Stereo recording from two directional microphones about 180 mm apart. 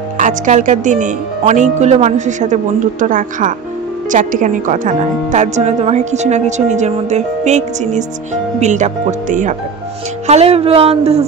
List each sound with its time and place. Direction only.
0.2 s a woman's voice: 45° right (ahead or behind)